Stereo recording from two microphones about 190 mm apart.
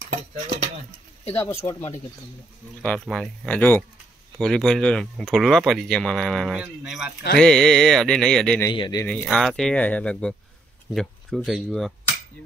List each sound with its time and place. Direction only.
1.3 s speech: 15° left (ahead or behind)
2.8 s speech: 5° left (ahead or behind)
8.6 s speech: 20° left (ahead or behind)
9.0 s speech: 5° left (ahead or behind)